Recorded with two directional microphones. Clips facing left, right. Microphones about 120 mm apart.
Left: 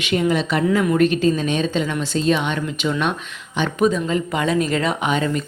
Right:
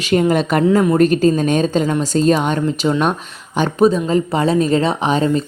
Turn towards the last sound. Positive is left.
turn(degrees=-30)  # may be behind; listen again after turning